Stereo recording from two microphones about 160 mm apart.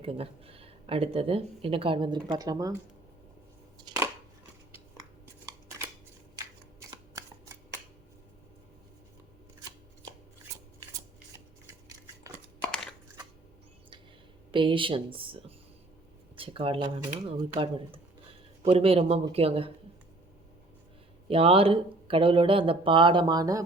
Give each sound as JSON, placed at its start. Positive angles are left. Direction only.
{"t": 0.0, "sound": "speech", "side_deg": -35}
{"t": 3.9, "sound": "scissors", "side_deg": -25}
{"t": 6.3, "sound": "shuffling cards", "side_deg": -20}
{"t": 12.6, "sound": "a sound", "side_deg": 5}
{"t": 14.5, "sound": "speech", "side_deg": -30}
{"t": 21.2, "sound": "speech", "side_deg": -35}